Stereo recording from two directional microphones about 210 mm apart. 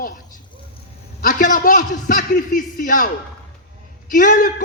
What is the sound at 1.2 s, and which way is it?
A man's voice, 40° left (ahead or behind).